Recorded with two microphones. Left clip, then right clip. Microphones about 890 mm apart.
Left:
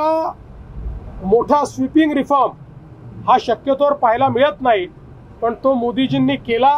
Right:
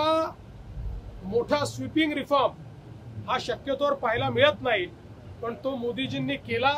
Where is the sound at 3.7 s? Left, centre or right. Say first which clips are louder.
Left 11 dB; left.